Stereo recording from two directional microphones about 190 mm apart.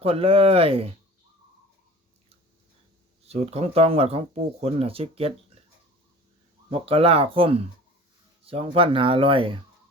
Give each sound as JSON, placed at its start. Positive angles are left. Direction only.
{"t": 0.0, "sound": "speech", "side_deg": -30}
{"t": 3.2, "sound": "speech", "side_deg": -35}
{"t": 6.7, "sound": "speech", "side_deg": -30}